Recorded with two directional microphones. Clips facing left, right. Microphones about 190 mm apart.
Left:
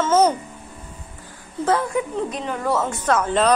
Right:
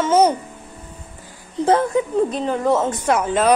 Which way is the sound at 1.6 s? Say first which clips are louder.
Right 4 dB; 20° right (ahead or behind).